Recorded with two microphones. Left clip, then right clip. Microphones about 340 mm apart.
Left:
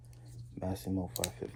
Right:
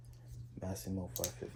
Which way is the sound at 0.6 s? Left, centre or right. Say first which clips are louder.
Left 6 dB; centre.